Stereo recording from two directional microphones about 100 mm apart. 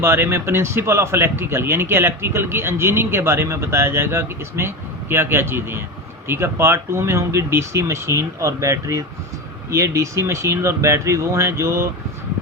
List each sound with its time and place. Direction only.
0.0 s speech: 25° right (ahead or behind)